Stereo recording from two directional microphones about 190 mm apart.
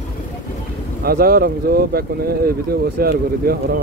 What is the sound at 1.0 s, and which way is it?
Speech, 50° right (ahead or behind).